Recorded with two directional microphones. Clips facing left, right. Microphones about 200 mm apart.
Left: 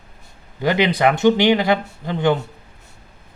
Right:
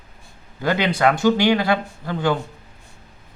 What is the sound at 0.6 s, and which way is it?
Speech, 15° left (ahead or behind).